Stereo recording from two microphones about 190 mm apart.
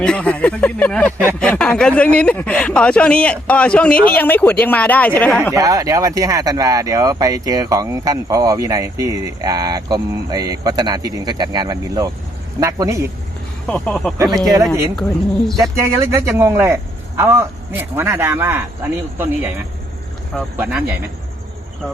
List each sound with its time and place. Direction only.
0.0 s speech: 5° left (ahead or behind)
5.5 s speech: 20° right (ahead or behind)
13.7 s speech: 5° left (ahead or behind)
14.2 s speech: 20° right (ahead or behind)
15.7 s speech: 15° right (ahead or behind)